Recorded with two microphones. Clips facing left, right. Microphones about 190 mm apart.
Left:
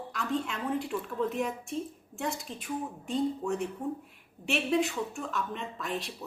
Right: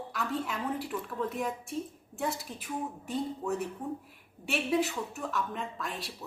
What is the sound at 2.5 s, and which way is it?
Speech, 25° left (ahead or behind).